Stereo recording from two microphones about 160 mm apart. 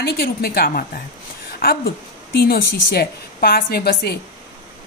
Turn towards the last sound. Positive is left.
turn(degrees=70)  # may be behind; listen again after turning